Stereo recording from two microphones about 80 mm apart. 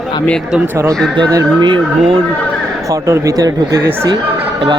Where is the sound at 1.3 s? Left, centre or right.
Right.